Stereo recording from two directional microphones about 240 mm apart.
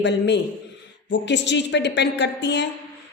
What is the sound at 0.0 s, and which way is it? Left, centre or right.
A woman's voice, left.